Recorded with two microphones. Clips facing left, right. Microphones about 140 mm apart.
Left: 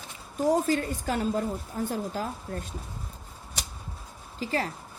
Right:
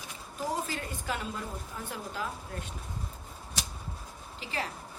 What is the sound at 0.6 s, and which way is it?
A woman's voice, 40° left (ahead or behind).